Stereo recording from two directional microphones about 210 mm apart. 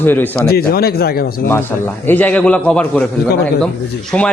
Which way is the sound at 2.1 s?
10° left (ahead or behind).